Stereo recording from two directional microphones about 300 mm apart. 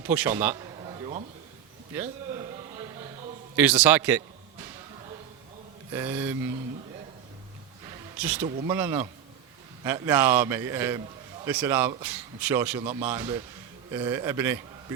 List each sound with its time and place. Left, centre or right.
0.0 s a man's voice: centre
0.5 s a sound: centre
3.5 s a man's voice: centre
5.9 s a man's voice: centre
8.2 s a man's voice: centre
12.8 s a man's voice: right
13.1 s a man's voice: centre